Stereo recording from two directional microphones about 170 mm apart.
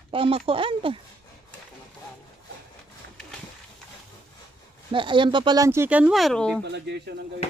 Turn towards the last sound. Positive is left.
turn(degrees=-80)